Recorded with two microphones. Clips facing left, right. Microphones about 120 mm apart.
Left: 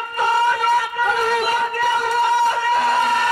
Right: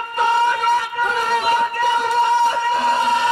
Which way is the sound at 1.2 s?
25° right (ahead or behind).